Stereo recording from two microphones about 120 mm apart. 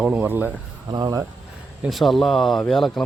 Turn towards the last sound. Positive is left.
turn(degrees=0)  # may be behind; listen again after turning